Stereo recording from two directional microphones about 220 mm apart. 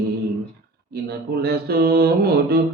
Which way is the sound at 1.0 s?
45° right (ahead or behind).